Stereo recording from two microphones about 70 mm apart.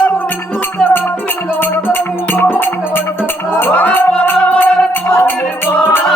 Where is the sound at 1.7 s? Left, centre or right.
Left.